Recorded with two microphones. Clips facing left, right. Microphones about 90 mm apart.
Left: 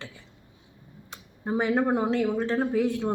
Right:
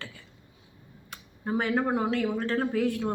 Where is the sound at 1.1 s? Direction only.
20° left (ahead or behind).